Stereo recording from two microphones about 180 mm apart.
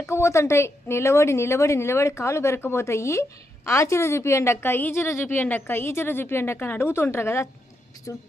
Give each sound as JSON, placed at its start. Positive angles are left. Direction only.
{"t": 0.0, "sound": "a woman's voice", "side_deg": 15}